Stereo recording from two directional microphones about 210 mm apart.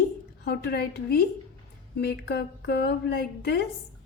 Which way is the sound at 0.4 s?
50° left (ahead or behind).